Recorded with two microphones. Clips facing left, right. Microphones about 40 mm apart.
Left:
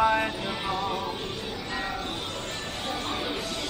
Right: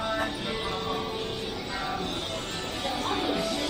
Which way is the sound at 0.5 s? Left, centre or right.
Centre.